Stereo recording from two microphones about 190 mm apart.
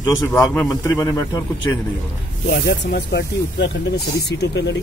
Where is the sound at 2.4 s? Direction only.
55° left (ahead or behind).